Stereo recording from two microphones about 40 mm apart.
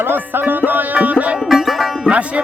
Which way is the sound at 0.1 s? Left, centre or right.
Right.